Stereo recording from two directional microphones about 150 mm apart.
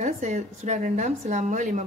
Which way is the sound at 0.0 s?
55° right (ahead or behind).